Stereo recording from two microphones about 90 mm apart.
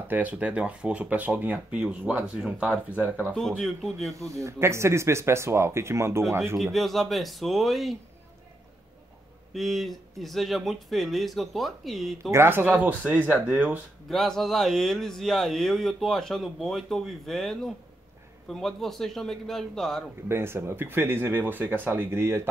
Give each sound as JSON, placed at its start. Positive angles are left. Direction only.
{"t": 0.1, "sound": "speech", "side_deg": -15}
{"t": 3.3, "sound": "speech", "side_deg": 0}
{"t": 4.3, "sound": "speech", "side_deg": -35}
{"t": 6.6, "sound": "speech", "side_deg": 0}
{"t": 9.5, "sound": "speech", "side_deg": 0}
{"t": 12.3, "sound": "speech", "side_deg": -25}
{"t": 14.0, "sound": "speech", "side_deg": 5}
{"t": 20.2, "sound": "speech", "side_deg": -25}